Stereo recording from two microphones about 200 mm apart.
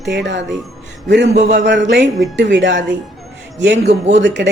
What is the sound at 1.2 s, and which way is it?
Speech, 35° right (ahead or behind).